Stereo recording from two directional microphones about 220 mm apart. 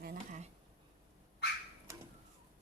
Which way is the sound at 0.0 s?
40° right (ahead or behind).